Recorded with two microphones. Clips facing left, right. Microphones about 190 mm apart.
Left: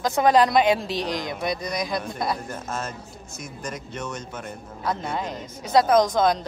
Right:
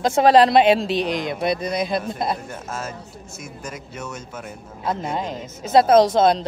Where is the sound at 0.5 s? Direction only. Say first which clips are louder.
Right 4 dB; 25° right (ahead or behind).